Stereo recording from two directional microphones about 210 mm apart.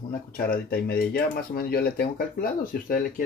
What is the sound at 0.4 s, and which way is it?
Speech, 45° left (ahead or behind).